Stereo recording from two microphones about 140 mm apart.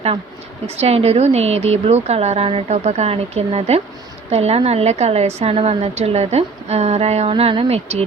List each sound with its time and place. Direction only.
0.8 s a woman's voice: 50° right (ahead or behind)